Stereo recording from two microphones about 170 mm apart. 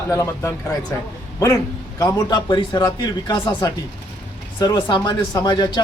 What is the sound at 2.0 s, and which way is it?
Speech, 25° left (ahead or behind).